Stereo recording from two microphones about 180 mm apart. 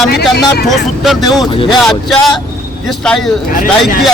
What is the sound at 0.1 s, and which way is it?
Speech, 65° left (ahead or behind).